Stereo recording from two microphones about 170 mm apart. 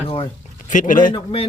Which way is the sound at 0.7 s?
50° left (ahead or behind).